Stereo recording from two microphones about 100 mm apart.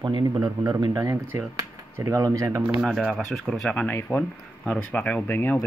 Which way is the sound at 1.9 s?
30° right (ahead or behind).